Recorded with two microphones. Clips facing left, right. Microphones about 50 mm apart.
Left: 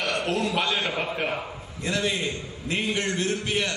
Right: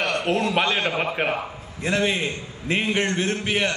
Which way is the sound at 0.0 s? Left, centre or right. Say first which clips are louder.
Right 3 dB; right.